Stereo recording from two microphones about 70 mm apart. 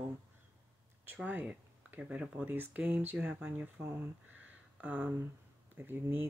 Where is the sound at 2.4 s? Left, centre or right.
Right.